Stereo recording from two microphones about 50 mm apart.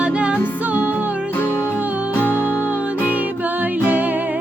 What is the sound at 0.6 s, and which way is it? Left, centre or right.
Music, right.